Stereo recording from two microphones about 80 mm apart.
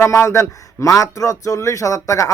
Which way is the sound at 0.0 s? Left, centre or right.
Left.